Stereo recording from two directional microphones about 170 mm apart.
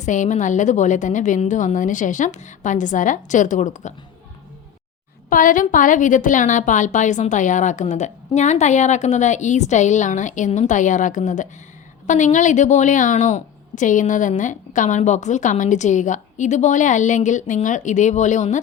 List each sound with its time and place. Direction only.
0.0 s a woman's voice: 45° left (ahead or behind)
5.3 s a woman's voice: 50° left (ahead or behind)